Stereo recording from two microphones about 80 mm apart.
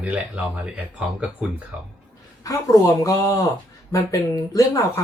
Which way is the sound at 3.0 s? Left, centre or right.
Left.